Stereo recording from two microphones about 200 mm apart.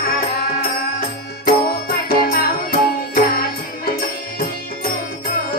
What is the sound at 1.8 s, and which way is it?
Music, 50° left (ahead or behind).